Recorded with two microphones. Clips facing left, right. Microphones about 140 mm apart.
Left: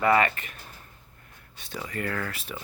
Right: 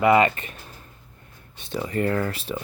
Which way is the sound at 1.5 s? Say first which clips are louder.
Right 8 dB; 25° right (ahead or behind).